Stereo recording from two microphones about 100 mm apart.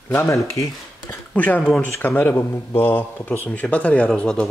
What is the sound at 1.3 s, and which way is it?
Speech, 15° left (ahead or behind).